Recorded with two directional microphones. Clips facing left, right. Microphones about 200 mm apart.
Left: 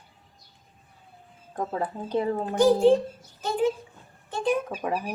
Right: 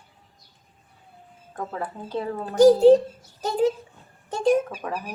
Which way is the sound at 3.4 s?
40° right (ahead or behind).